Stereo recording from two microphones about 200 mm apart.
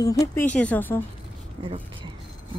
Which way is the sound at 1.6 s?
25° right (ahead or behind).